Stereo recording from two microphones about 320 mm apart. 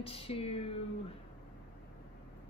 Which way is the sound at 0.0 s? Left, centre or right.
Centre.